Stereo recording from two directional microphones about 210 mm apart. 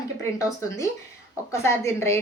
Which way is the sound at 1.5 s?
15° left (ahead or behind).